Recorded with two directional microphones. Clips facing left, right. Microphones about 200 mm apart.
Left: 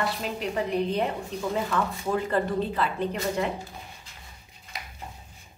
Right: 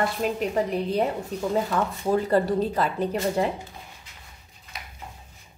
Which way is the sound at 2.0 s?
35° right (ahead or behind).